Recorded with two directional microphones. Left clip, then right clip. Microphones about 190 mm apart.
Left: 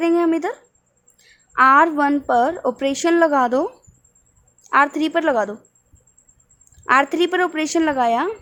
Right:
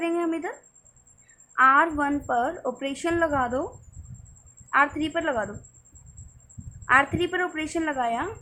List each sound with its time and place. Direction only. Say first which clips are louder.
0.0 s a sound: left 9 dB; 50° left (ahead or behind)
1.5 s a woman's voice: left 6 dB; 50° left (ahead or behind)
4.7 s speech: left 6 dB; 55° left (ahead or behind)
6.8 s speech: left 5 dB; 55° left (ahead or behind)